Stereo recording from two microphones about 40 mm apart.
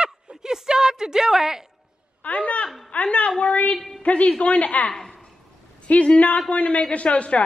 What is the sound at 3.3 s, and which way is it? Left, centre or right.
Speech, centre.